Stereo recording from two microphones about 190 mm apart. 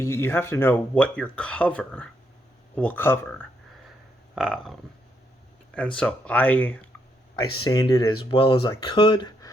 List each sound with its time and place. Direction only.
0.0 s speech: 15° left (ahead or behind)
4.4 s a sound: centre (ahead or behind)
6.0 s speech: 5° left (ahead or behind); by 9.5 s 25° left (ahead or behind)